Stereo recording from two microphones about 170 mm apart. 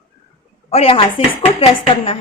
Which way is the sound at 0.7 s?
35° left (ahead or behind).